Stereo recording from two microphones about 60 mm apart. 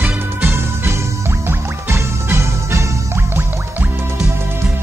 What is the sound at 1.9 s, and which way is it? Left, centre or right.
Music, right.